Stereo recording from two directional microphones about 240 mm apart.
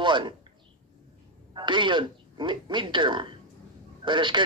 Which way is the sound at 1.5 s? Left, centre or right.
Centre.